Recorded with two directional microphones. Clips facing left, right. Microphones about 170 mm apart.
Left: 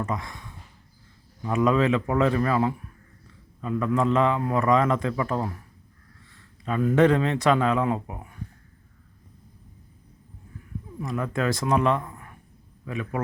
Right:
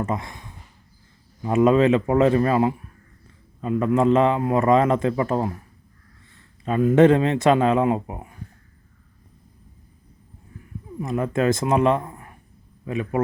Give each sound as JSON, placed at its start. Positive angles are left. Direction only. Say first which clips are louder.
{"t": 0.0, "sound": "a man's voice", "louder": "right 3 dB", "side_deg": -25}
{"t": 6.8, "sound": "a man's voice", "louder": "right 5 dB", "side_deg": -25}
{"t": 11.0, "sound": "a man's voice", "louder": "right 5 dB", "side_deg": -25}